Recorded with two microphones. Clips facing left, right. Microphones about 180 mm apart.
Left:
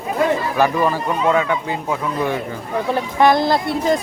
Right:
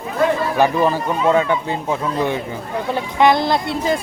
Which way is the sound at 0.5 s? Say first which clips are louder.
Right 1 dB; 20° right (ahead or behind).